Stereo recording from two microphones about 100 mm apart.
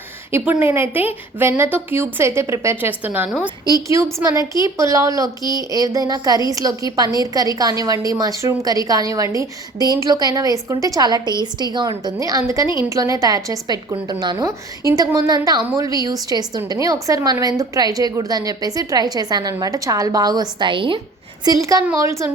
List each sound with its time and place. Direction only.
0.3 s a woman's voice: 25° right (ahead or behind)
3.8 s a woman's voice: 30° right (ahead or behind); by 21.0 s 60° right (ahead or behind)
21.4 s a woman's voice: 35° right (ahead or behind)